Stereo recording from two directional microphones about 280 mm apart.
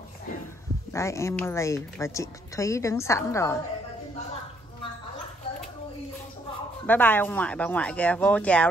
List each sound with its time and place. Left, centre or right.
0.9 s speech: centre
6.9 s speech: centre